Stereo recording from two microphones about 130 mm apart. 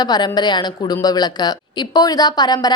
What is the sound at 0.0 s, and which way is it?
A woman's voice, 35° left (ahead or behind).